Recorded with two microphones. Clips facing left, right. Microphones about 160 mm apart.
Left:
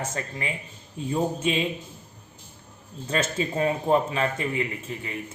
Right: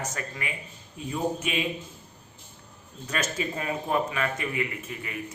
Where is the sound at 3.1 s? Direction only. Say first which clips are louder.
Left 4 dB; 25° left (ahead or behind).